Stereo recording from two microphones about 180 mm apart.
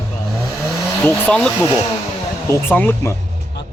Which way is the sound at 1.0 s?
5° left (ahead or behind).